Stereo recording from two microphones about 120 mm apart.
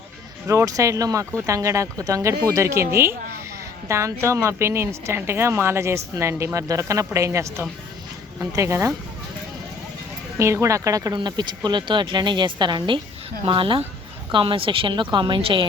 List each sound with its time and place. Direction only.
0.4 s speech: 25° right (ahead or behind)
10.3 s a woman's voice: 25° right (ahead or behind); by 15.6 s 45° right (ahead or behind)